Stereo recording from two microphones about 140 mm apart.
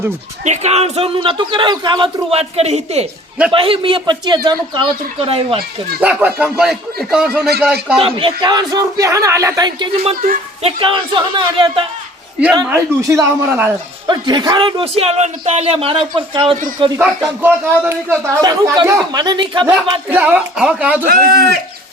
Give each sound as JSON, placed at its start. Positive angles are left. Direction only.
{"t": 0.4, "sound": "a man's voice", "side_deg": -55}
{"t": 2.3, "sound": "a man's voice", "side_deg": -45}
{"t": 6.0, "sound": "speech", "side_deg": -10}
{"t": 7.9, "sound": "a man's voice", "side_deg": -40}
{"t": 9.9, "sound": "a man's voice", "side_deg": -45}
{"t": 12.6, "sound": "speech", "side_deg": -20}
{"t": 14.1, "sound": "a man's voice", "side_deg": -30}
{"t": 17.0, "sound": "a man's voice", "side_deg": -15}
{"t": 20.1, "sound": "speech", "side_deg": -10}
{"t": 21.0, "sound": "speech", "side_deg": -90}